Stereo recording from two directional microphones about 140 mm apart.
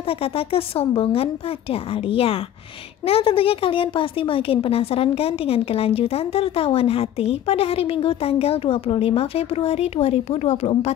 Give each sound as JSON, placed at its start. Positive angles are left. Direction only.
{"t": 0.2, "sound": "a woman's voice", "side_deg": 45}